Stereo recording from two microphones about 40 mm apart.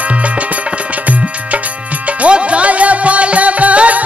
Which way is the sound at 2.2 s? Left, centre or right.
Right.